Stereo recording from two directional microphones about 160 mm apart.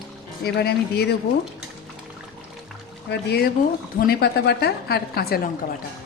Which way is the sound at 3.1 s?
90° left.